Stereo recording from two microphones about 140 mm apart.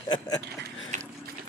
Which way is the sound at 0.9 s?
60° right (ahead or behind).